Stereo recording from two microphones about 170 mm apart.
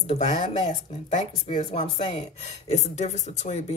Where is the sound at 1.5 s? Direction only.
30° left (ahead or behind).